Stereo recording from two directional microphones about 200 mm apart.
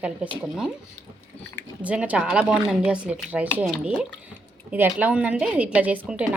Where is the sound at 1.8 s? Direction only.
5° right (ahead or behind).